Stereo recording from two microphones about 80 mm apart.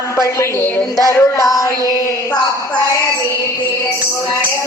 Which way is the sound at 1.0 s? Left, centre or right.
Left.